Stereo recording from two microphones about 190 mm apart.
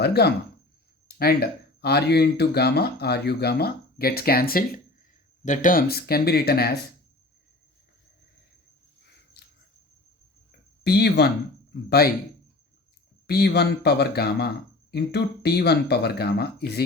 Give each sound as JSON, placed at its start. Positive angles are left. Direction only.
{"t": 0.0, "sound": "speech", "side_deg": 60}
{"t": 9.4, "sound": "cricket", "side_deg": 60}
{"t": 10.8, "sound": "speech", "side_deg": 60}
{"t": 13.2, "sound": "speech", "side_deg": 55}